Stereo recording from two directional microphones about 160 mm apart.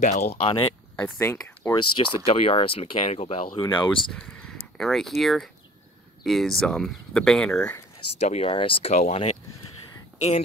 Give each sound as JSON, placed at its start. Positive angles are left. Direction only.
{"t": 0.0, "sound": "speech", "side_deg": 45}
{"t": 1.0, "sound": "speech", "side_deg": 10}
{"t": 1.8, "sound": "speech", "side_deg": 35}
{"t": 3.5, "sound": "speech", "side_deg": 30}
{"t": 4.1, "sound": "speech", "side_deg": 5}
{"t": 8.2, "sound": "speech", "side_deg": 40}